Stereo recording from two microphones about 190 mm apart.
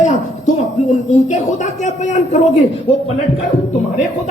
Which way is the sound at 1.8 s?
40° left (ahead or behind).